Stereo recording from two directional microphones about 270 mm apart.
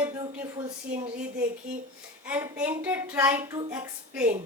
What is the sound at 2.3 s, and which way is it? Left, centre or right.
A woman's voice, centre.